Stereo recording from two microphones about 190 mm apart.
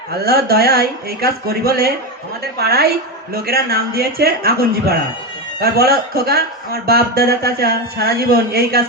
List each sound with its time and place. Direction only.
0.1 s a man's voice: 55° right (ahead or behind)